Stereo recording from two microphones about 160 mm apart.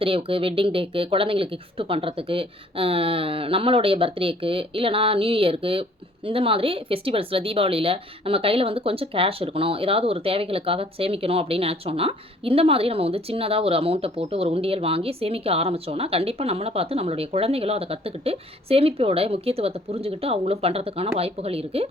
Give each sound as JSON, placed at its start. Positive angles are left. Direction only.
{"t": 0.0, "sound": "speech", "side_deg": -35}